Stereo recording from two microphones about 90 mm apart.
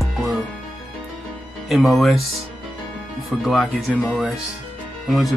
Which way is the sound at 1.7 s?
Centre (ahead or behind).